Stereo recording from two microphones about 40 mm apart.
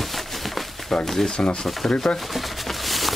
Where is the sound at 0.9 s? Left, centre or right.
Centre.